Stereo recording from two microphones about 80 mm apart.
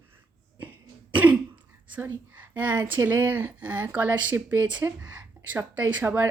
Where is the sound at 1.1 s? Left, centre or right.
Right.